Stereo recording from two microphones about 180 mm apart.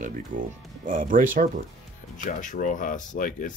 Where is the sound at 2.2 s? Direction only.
45° left (ahead or behind).